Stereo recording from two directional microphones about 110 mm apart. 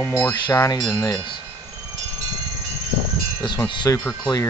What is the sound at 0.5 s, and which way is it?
Speech, 25° left (ahead or behind).